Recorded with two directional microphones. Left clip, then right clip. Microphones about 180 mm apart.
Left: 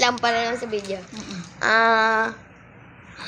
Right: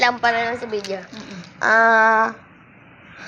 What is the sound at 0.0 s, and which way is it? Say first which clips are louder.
A child's voice: right 2 dB; 15° left (ahead or behind).